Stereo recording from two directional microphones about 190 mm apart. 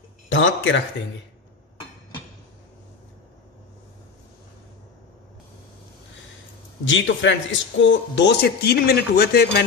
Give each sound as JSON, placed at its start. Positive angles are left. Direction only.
{"t": 0.3, "sound": "a man's voice", "side_deg": 80}
{"t": 6.8, "sound": "speech", "side_deg": 75}